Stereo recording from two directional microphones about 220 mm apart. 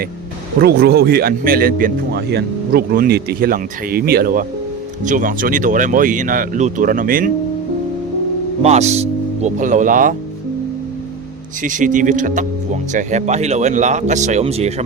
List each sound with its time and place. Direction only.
0.6 s speech: 45° right (ahead or behind)
8.6 s speech: 30° right (ahead or behind)
11.6 s speech: 35° right (ahead or behind)